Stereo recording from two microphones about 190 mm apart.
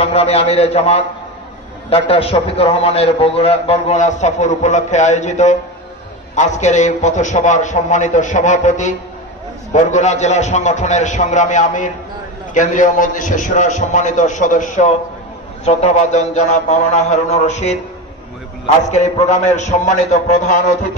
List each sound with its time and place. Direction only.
0.0 s a man's voice: 30° left (ahead or behind)
18.9 s a man's voice: 35° left (ahead or behind)